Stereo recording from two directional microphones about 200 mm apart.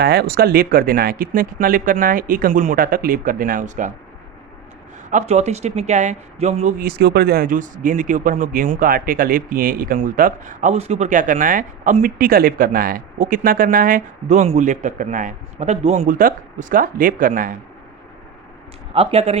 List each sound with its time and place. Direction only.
0.0 s speech: 55° right (ahead or behind)
5.1 s speech: 35° right (ahead or behind)
18.9 s speech: 30° right (ahead or behind)